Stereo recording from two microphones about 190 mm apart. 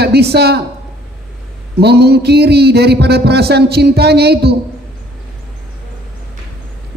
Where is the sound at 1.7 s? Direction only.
60° right (ahead or behind).